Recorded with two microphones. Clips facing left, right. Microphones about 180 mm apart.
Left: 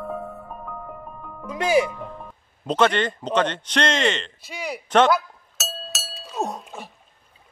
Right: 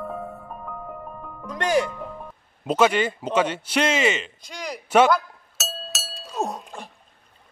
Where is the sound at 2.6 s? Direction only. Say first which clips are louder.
Right 1 dB; 5° right (ahead or behind).